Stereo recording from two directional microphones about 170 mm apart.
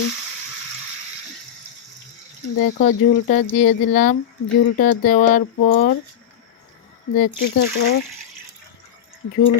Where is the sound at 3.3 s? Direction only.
50° left (ahead or behind).